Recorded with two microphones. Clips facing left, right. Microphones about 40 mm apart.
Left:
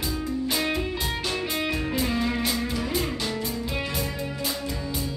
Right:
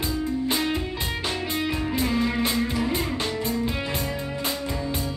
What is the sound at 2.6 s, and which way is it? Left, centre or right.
Music, centre.